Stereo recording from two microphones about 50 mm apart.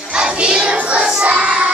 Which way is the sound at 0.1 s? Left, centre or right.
Centre.